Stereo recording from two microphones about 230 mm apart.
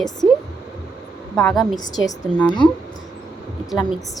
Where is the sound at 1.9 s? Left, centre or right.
Centre.